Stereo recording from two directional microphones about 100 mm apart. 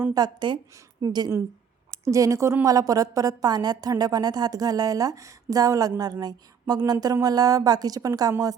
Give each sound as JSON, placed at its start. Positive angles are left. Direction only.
{"t": 0.1, "sound": "a woman's voice", "side_deg": -45}
{"t": 1.9, "sound": "a woman's voice", "side_deg": -30}